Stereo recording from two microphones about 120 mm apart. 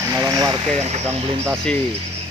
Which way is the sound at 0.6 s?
65° right (ahead or behind).